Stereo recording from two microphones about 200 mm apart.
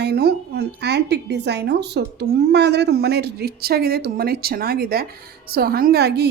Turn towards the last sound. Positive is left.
turn(degrees=-55)  # may be behind; listen again after turning